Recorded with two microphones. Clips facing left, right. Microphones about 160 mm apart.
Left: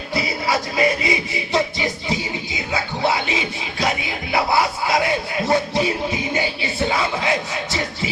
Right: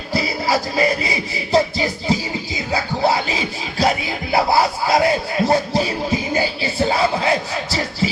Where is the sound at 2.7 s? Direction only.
35° right (ahead or behind).